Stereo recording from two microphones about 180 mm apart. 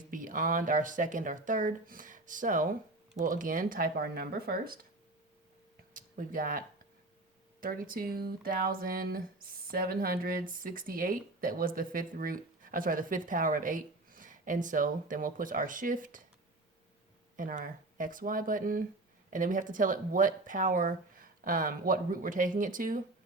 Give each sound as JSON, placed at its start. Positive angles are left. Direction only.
{"t": 0.1, "sound": "speech", "side_deg": -50}
{"t": 5.9, "sound": "speech", "side_deg": -50}
{"t": 17.3, "sound": "speech", "side_deg": -50}